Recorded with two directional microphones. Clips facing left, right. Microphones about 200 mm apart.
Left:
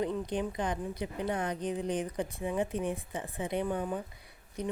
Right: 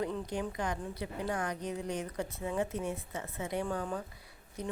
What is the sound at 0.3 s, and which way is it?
A woman's voice, 20° left (ahead or behind).